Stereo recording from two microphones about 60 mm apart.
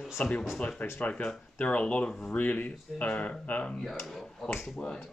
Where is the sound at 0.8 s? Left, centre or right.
Left.